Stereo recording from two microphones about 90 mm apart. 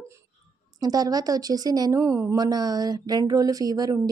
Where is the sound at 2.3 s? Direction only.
45° right (ahead or behind).